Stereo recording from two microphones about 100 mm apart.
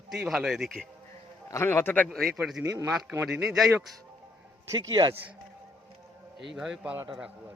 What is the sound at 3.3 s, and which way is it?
Speech, 5° right (ahead or behind).